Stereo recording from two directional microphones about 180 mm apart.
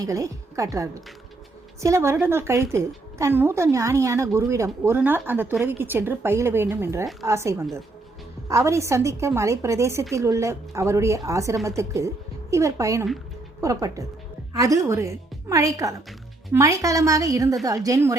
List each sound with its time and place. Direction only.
0.0 s a woman's voice: 20° right (ahead or behind)